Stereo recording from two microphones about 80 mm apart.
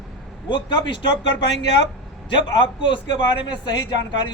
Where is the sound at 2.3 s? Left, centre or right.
Left.